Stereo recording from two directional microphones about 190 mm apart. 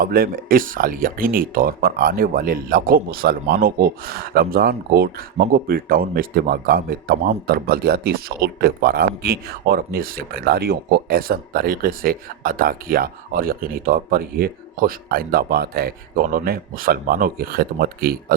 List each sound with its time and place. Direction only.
0.0 s speech: 50° right (ahead or behind)